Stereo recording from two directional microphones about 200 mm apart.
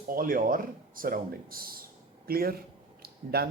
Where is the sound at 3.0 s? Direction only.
50° right (ahead or behind).